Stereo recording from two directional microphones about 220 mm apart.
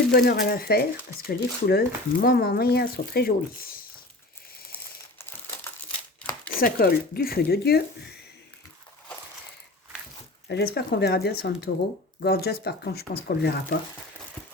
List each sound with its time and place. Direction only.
0.1 s speech: 45° left (ahead or behind)
6.5 s speech: 40° left (ahead or behind)
10.5 s speech: 45° left (ahead or behind)